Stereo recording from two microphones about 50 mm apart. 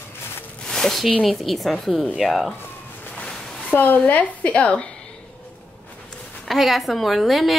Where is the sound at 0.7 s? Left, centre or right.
Centre.